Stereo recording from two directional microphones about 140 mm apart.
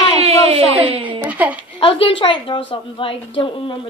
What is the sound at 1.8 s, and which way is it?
A woman's voice, 40° left (ahead or behind).